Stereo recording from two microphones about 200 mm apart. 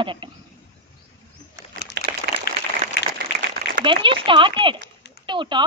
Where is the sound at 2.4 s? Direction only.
60° left (ahead or behind).